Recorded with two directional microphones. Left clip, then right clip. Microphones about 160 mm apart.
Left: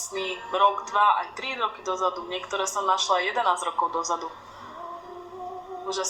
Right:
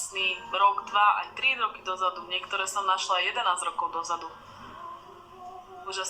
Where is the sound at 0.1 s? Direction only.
20° left (ahead or behind).